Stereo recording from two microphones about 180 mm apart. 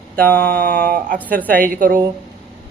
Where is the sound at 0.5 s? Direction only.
60° right (ahead or behind).